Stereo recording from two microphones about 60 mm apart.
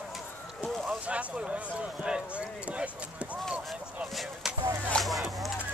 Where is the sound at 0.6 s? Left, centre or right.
Right.